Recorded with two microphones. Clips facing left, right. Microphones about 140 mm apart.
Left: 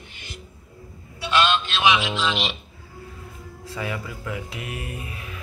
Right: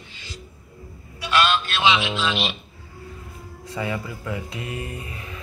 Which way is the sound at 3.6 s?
Centre (ahead or behind).